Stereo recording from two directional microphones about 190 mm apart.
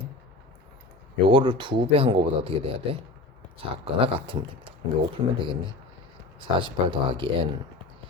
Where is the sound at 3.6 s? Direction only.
30° right (ahead or behind).